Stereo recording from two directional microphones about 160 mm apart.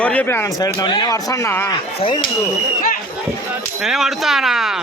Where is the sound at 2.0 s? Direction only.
30° left (ahead or behind).